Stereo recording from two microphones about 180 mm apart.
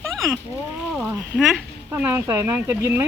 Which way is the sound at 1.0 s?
Centre (ahead or behind).